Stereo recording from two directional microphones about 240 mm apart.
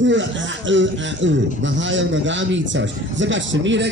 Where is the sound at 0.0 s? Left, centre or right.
Right.